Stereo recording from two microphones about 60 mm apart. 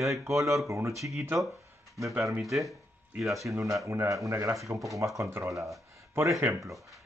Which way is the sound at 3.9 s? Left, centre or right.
Right.